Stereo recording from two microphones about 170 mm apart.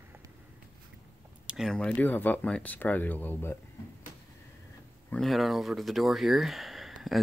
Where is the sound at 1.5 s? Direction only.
Centre (ahead or behind).